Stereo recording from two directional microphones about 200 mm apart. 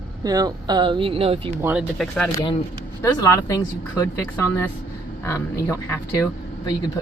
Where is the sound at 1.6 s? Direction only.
5° right (ahead or behind).